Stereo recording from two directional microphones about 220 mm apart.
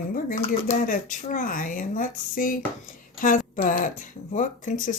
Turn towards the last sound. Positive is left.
turn(degrees=35)  # may be behind; listen again after turning